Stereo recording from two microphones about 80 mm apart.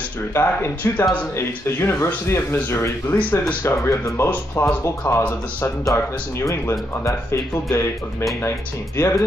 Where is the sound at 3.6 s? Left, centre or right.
Left.